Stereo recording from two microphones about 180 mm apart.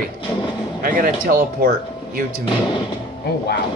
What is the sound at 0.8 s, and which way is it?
Speech, 50° right (ahead or behind).